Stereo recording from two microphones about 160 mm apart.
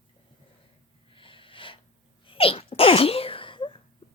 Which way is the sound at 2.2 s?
35° left (ahead or behind).